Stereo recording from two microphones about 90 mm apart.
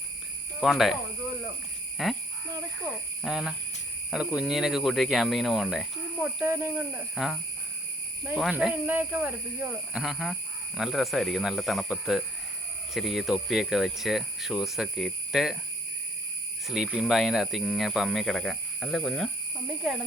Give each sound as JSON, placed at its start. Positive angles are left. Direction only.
{"t": 0.6, "sound": "speech", "side_deg": 0}
{"t": 2.0, "sound": "speech", "side_deg": 0}
{"t": 3.2, "sound": "speech", "side_deg": -5}
{"t": 6.4, "sound": "speech", "side_deg": -20}
{"t": 8.5, "sound": "speech", "side_deg": -15}
{"t": 9.9, "sound": "speech", "side_deg": 0}
{"t": 16.6, "sound": "speech", "side_deg": -5}